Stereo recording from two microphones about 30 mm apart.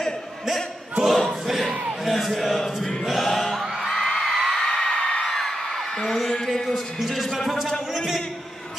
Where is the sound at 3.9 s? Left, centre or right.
Centre.